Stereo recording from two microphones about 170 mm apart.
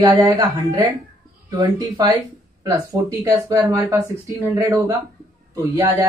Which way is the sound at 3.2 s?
20° right (ahead or behind).